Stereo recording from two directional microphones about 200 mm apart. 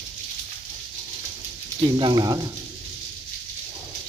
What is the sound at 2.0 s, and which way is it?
Speech, 20° right (ahead or behind).